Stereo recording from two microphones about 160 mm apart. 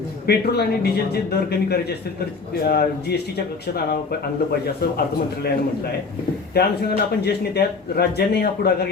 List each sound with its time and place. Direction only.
0.3 s speech: 85° left
4.8 s a man's voice: 75° left (ahead or behind)
6.5 s speech: 80° left